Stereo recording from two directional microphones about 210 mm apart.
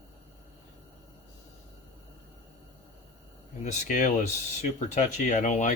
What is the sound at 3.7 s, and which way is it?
Speech, 35° left (ahead or behind).